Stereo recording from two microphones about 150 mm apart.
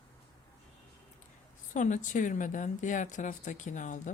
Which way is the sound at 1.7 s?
55° left (ahead or behind).